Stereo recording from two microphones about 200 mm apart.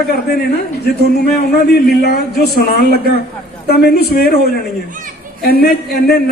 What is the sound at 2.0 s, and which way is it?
A man's voice, 55° left (ahead or behind).